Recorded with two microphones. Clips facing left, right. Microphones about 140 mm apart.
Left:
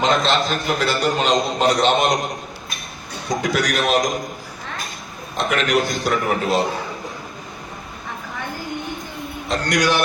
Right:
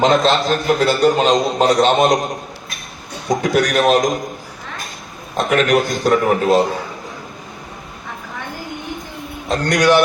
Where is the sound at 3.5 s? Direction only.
45° right (ahead or behind).